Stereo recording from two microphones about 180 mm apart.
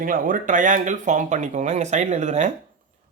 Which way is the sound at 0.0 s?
50° right (ahead or behind).